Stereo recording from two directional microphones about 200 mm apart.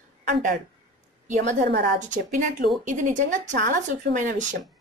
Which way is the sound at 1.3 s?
40° right (ahead or behind).